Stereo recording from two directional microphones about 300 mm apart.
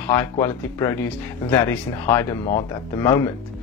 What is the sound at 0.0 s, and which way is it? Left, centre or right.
Speech, centre.